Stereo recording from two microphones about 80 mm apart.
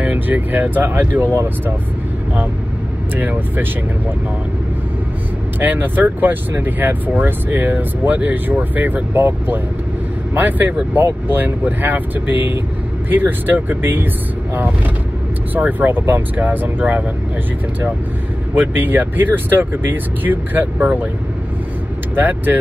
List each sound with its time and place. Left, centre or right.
0.0 s speech: right
3.2 s speech: right
5.6 s speech: right
15.5 s speech: right
18.5 s speech: right
22.1 s speech: right